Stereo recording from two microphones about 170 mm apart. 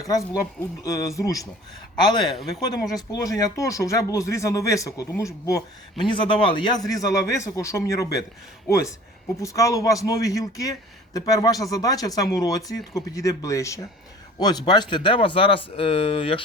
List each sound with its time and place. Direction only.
0.0 s speech: 20° left (ahead or behind)
2.6 s speech: 20° left (ahead or behind)
9.4 s speech: 20° left (ahead or behind)